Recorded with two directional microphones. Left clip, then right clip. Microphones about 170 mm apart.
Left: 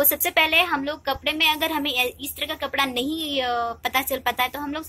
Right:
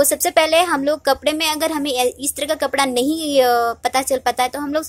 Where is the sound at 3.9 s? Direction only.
30° right (ahead or behind).